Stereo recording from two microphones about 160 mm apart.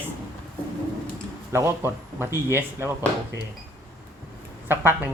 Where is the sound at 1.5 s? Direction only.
15° right (ahead or behind).